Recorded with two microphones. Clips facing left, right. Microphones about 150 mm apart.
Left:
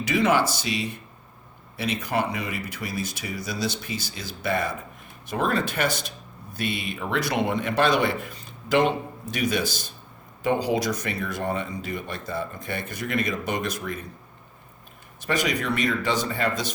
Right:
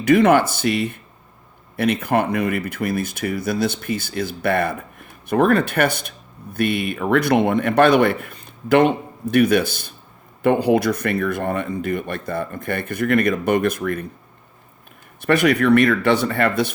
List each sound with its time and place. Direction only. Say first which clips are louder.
0.0 s speech: right 8 dB; 55° right (ahead or behind)
15.2 s speech: right 9 dB; 60° right (ahead or behind)